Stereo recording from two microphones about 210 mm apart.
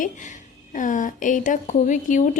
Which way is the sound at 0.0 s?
35° left (ahead or behind).